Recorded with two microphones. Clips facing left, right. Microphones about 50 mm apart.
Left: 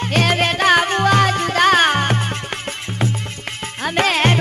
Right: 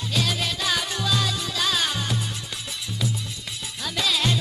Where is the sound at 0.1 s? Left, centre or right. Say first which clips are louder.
Left 9 dB; left.